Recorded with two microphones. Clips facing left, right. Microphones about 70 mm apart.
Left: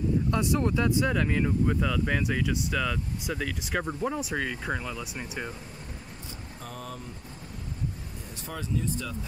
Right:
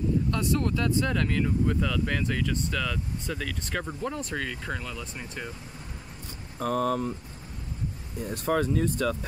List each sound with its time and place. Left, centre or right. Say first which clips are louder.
0.3 s speech: left 1 dB; centre
6.6 s speech: right 15 dB; right
8.3 s speech: right 10 dB; right